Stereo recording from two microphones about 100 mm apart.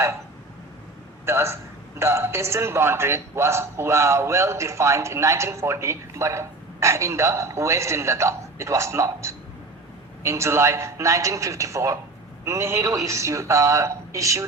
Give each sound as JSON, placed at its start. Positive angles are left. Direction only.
{"t": 1.2, "sound": "a man's voice", "side_deg": -25}